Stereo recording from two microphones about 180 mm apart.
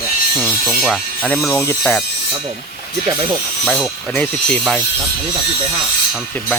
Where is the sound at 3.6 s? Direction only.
5° left (ahead or behind).